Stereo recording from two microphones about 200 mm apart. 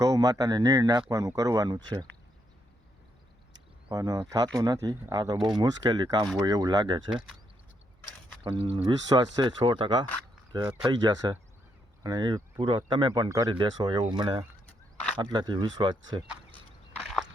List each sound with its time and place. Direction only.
0.0 s speech: 15° right (ahead or behind)
3.8 s speech: 20° right (ahead or behind)
8.4 s speech: 25° right (ahead or behind)